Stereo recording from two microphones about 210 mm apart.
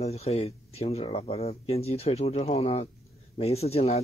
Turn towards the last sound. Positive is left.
turn(degrees=30)  # may be behind; listen again after turning